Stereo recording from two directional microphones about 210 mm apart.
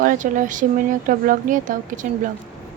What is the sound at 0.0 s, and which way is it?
Speech, 40° right (ahead or behind).